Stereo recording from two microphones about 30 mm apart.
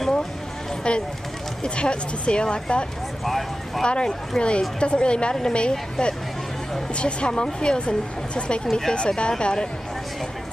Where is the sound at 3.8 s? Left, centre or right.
Left.